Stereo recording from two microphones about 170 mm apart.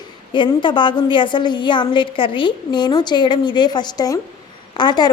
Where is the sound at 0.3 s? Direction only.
30° left (ahead or behind).